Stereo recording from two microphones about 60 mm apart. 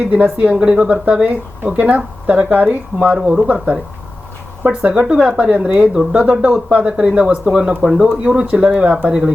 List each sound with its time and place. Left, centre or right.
0.1 s speech: right
3.2 s speech: centre
4.6 s speech: right
5.9 s speech: centre
6.9 s speech: centre